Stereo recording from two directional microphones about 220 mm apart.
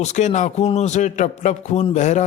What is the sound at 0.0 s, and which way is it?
A man's voice, 30° left (ahead or behind).